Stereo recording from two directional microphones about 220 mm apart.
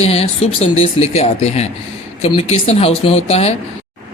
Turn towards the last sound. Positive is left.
turn(degrees=30)  # may be behind; listen again after turning